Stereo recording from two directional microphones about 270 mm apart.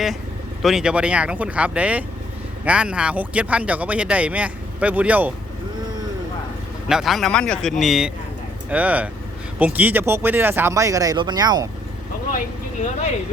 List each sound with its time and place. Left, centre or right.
0.6 s speech: centre
6.8 s speech: centre